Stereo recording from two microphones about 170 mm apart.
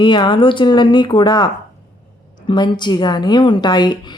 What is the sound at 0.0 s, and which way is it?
A woman's voice, 25° left (ahead or behind).